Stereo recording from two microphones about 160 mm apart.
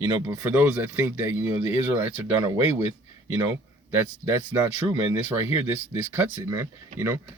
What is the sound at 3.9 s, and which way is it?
Speech, 15° right (ahead or behind).